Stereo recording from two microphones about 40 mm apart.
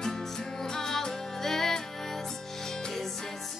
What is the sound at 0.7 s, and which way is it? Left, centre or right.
Music, centre.